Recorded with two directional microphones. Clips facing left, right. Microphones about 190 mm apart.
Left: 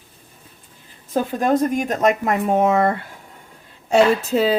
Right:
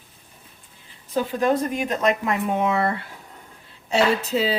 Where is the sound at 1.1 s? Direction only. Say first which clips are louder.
Left 2 dB; 50° left (ahead or behind).